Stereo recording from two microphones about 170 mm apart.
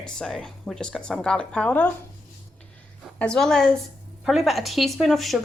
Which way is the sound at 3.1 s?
5° left (ahead or behind).